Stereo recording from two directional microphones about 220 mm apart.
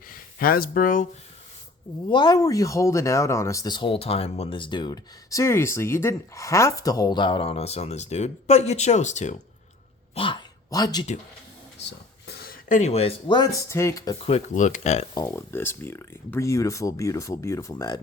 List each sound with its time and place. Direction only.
0.1 s speech: 40° left (ahead or behind)
2.0 s speech: 20° left (ahead or behind)
10.2 s a sound: 20° left (ahead or behind)
12.3 s speech: 45° left (ahead or behind); by 14.3 s 15° left (ahead or behind)
14.3 s speech: 35° left (ahead or behind)
15.3 s speech: 10° left (ahead or behind)